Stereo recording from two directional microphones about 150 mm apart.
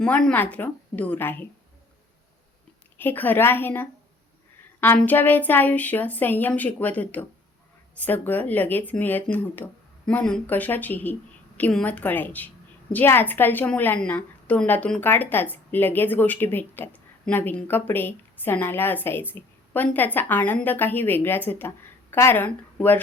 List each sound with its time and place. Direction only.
0.0 s a woman's voice: 5° left (ahead or behind)
3.0 s a woman's voice: 15° left (ahead or behind)